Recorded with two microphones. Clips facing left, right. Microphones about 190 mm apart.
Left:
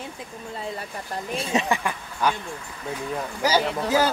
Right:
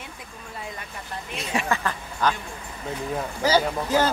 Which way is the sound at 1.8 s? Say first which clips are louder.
Even; 10° left (ahead or behind).